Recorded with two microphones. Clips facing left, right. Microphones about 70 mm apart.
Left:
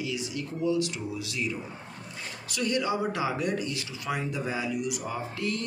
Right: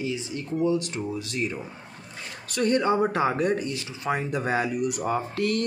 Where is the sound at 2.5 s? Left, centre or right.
Right.